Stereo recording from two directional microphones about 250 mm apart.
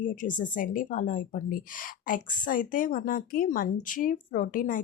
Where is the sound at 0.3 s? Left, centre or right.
Left.